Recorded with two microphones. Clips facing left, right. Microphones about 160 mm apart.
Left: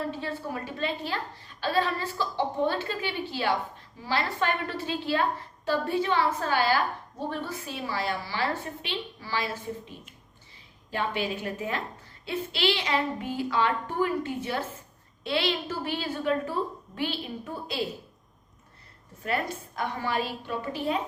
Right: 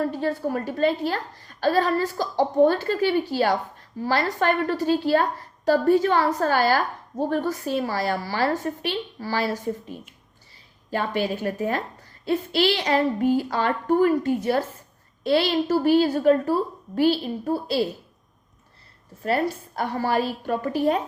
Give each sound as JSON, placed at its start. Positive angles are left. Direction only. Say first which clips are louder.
{"t": 0.0, "sound": "a woman's voice", "louder": "right 8 dB", "side_deg": -45}
{"t": 10.9, "sound": "a woman's voice", "louder": "right 5 dB", "side_deg": -40}
{"t": 19.2, "sound": "a woman's voice", "louder": "right 7 dB", "side_deg": -35}